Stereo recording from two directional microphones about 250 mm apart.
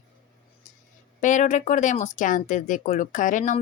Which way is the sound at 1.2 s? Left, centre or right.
Left.